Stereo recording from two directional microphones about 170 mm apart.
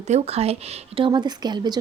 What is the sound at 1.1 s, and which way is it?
Speech, 25° right (ahead or behind).